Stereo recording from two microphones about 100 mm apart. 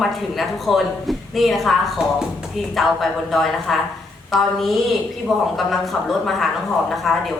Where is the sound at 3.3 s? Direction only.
Centre (ahead or behind).